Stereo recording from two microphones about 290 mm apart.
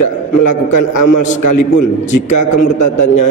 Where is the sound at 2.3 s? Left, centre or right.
Left.